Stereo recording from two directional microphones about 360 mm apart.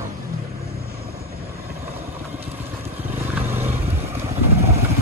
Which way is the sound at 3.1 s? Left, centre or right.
Centre.